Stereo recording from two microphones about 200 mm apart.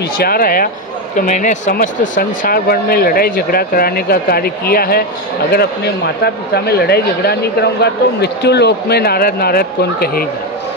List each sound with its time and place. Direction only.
0.2 s speech: 45° left (ahead or behind)